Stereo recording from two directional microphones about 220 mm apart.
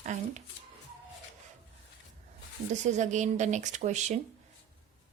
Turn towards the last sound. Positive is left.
turn(degrees=-30)  # may be behind; listen again after turning